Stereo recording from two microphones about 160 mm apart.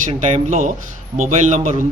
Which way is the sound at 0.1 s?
45° right (ahead or behind).